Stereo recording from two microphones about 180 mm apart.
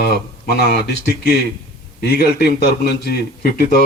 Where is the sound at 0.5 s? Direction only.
60° left (ahead or behind).